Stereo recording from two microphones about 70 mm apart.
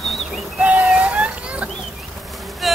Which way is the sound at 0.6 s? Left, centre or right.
Centre.